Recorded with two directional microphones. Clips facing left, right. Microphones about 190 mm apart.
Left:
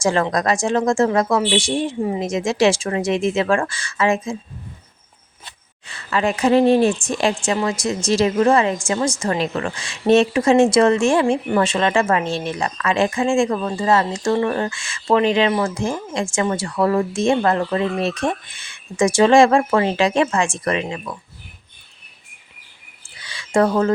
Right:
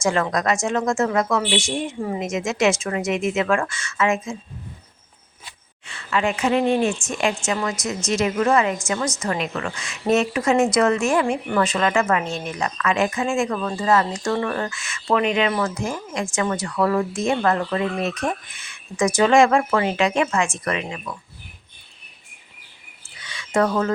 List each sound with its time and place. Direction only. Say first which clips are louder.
0.0 s speech: left 2 dB; 30° left (ahead or behind)
5.9 s a woman's voice: left 2 dB; 35° left (ahead or behind)
23.2 s a sound: left 3 dB; 30° left (ahead or behind)